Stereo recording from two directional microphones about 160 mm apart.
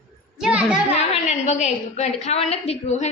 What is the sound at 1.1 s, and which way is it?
A woman's voice, 45° left (ahead or behind).